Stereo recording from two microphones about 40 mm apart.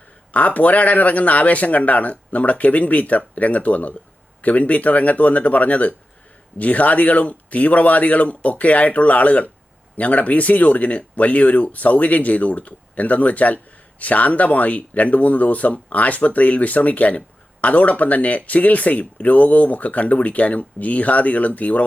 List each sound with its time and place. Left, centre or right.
0.3 s speech: left